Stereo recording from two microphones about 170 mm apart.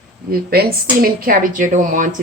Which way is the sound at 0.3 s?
65° right (ahead or behind).